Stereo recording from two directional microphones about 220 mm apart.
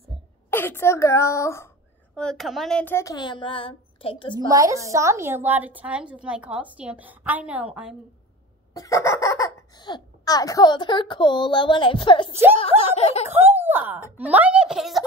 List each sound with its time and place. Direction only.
0.5 s speech: 10° left (ahead or behind)
2.1 s speech: centre (ahead or behind); by 4.5 s 20° left (ahead or behind)
4.5 s a woman's voice: 15° right (ahead or behind)
8.7 s speech: 15° left (ahead or behind)
13.4 s a woman's voice: 10° right (ahead or behind)